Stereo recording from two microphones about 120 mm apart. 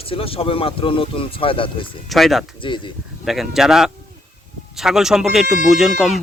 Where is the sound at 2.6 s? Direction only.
45° left (ahead or behind).